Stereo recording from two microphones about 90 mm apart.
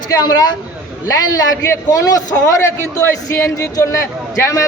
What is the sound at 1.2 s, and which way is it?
A man's voice, 40° left (ahead or behind).